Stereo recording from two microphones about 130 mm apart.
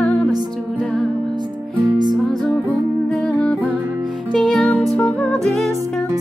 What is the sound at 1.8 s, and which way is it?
Music, 35° right (ahead or behind).